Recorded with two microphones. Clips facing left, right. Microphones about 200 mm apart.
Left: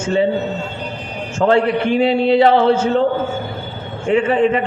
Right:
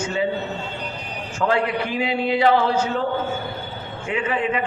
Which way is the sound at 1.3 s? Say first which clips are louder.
Left 7 dB; 25° left (ahead or behind).